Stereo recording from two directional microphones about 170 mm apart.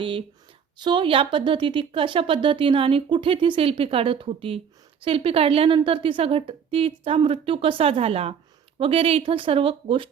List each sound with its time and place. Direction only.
0.0 s speech: 30° right (ahead or behind)